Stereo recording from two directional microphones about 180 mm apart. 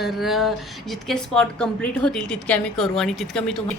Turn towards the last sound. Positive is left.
turn(degrees=0)  # may be behind; listen again after turning